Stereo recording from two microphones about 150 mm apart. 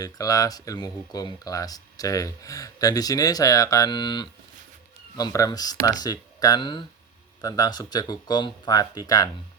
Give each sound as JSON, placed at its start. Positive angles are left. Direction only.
{"t": 0.0, "sound": "speech", "side_deg": 25}